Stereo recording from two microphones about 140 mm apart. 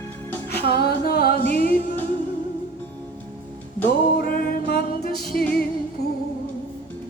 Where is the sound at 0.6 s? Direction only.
90° left.